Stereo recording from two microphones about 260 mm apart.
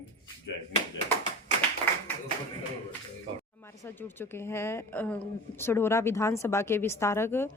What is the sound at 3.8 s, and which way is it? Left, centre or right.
Speech, centre.